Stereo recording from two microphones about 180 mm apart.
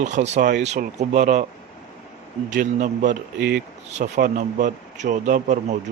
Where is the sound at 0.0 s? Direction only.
40° right (ahead or behind).